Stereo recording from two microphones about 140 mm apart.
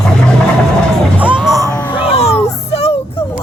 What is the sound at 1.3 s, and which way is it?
Music, 25° right (ahead or behind).